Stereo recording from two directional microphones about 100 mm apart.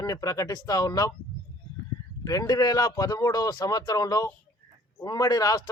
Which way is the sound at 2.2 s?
40° left (ahead or behind).